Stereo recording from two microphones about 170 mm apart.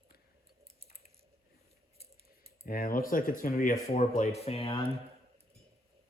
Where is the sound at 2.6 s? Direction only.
55° left (ahead or behind).